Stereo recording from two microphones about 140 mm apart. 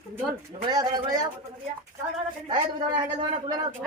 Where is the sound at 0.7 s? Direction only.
30° right (ahead or behind).